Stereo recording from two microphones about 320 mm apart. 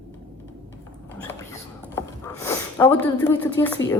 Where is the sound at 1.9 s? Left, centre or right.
Centre.